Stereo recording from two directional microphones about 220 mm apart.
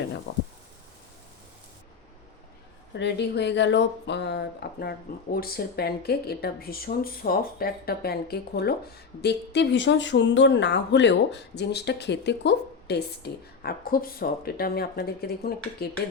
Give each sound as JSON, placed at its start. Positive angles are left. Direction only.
{"t": 0.3, "sound": "speech", "side_deg": 55}
{"t": 2.9, "sound": "speech", "side_deg": 50}